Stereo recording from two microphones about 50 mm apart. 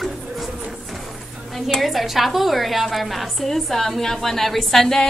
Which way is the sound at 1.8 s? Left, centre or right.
Centre.